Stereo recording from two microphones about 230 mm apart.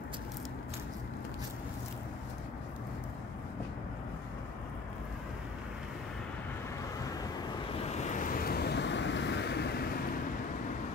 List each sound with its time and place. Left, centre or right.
7.9 s vehicle: left